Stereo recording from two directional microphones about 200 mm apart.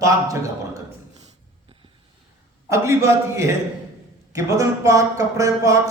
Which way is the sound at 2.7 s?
15° right (ahead or behind).